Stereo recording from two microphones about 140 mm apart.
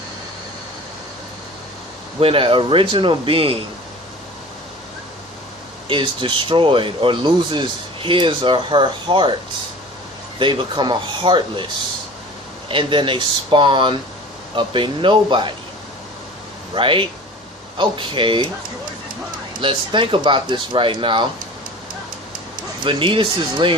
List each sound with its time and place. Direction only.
2.2 s speech: 40° right (ahead or behind)
5.9 s speech: 35° right (ahead or behind)
10.3 s speech: 35° right (ahead or behind)
12.6 s speech: 35° right (ahead or behind)
16.7 s speech: 35° right (ahead or behind)
19.6 s speech: 40° right (ahead or behind)
22.8 s speech: 35° right (ahead or behind)